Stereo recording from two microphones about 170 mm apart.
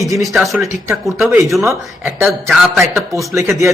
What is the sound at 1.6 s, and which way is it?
Speech, 15° right (ahead or behind).